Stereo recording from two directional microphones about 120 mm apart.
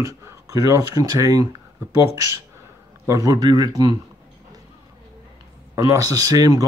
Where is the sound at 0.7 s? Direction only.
30° right (ahead or behind).